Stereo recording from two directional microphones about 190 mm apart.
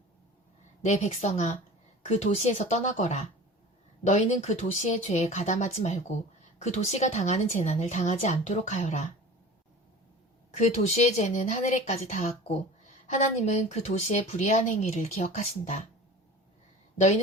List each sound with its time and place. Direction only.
0.9 s speech: 35° left (ahead or behind)
10.5 s speech: 40° left (ahead or behind)